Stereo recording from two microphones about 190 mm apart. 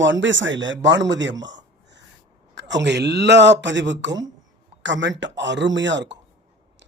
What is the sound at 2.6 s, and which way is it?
Speech, 70° right (ahead or behind).